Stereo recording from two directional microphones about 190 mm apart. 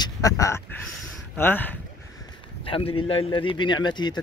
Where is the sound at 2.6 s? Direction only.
30° left (ahead or behind).